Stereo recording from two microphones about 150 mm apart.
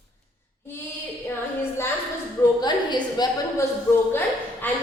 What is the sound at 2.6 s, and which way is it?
Speech, 30° left (ahead or behind).